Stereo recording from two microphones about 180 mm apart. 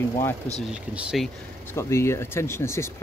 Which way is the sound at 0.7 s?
5° right (ahead or behind).